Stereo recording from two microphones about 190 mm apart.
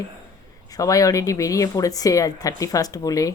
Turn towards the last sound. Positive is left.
turn(degrees=20)  # may be behind; listen again after turning